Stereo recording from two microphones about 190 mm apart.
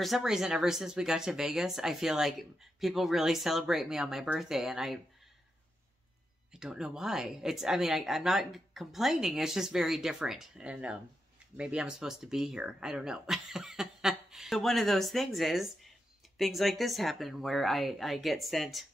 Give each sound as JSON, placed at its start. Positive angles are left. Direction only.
{"t": 0.0, "sound": "speech", "side_deg": 0}
{"t": 6.5, "sound": "speech", "side_deg": -5}